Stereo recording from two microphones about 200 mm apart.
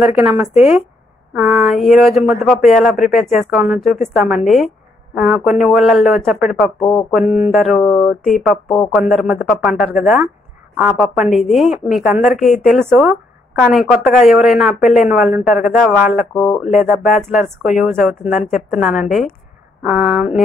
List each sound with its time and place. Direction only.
0.0 s speech: 5° right (ahead or behind)